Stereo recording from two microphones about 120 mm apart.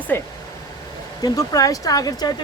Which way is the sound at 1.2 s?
30° left (ahead or behind).